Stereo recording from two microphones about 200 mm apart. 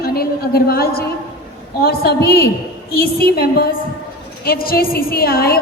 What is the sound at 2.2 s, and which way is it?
A woman's voice, 50° left (ahead or behind).